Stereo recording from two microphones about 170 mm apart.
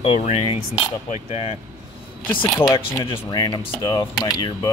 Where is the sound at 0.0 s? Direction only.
35° left (ahead or behind).